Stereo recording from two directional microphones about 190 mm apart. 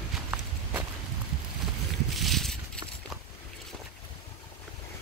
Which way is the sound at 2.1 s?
Centre (ahead or behind).